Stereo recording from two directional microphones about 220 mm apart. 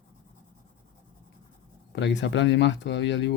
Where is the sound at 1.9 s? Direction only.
55° left (ahead or behind).